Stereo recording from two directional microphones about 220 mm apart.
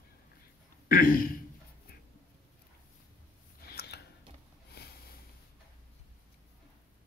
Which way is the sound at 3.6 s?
45° left (ahead or behind).